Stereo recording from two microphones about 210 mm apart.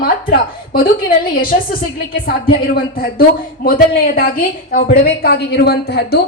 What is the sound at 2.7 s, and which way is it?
A woman's voice, 45° left (ahead or behind).